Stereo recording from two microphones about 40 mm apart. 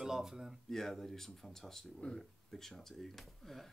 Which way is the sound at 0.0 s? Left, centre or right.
Centre.